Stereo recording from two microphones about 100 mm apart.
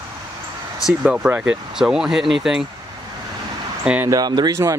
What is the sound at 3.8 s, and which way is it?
Speech, 15° right (ahead or behind).